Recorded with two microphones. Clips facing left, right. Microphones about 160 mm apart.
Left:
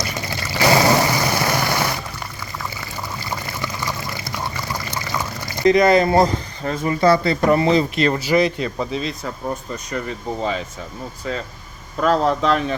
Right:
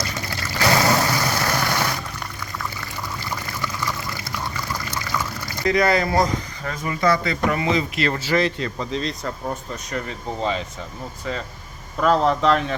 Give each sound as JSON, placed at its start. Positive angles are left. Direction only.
{"t": 0.0, "sound": "a sound", "side_deg": 10}
{"t": 3.2, "sound": "water", "side_deg": 15}
{"t": 5.5, "sound": "speech", "side_deg": 20}
{"t": 7.9, "sound": "speech", "side_deg": 20}
{"t": 11.9, "sound": "speech", "side_deg": 0}